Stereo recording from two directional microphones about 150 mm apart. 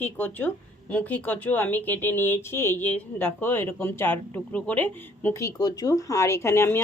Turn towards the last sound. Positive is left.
turn(degrees=15)  # may be behind; listen again after turning